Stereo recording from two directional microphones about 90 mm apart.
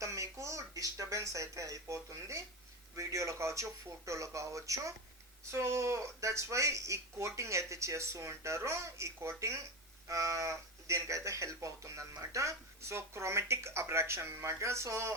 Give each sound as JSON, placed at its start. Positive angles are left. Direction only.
{"t": 0.0, "sound": "speech", "side_deg": -35}